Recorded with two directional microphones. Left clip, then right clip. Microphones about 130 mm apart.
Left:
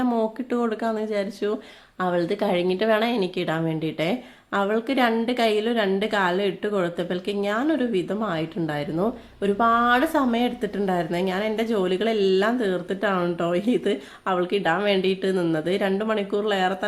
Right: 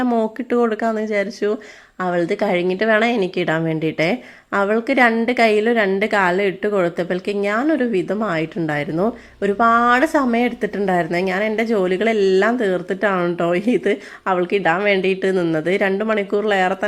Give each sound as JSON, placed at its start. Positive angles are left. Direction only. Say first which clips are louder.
{"t": 0.0, "sound": "speech", "louder": "right 5 dB", "side_deg": -35}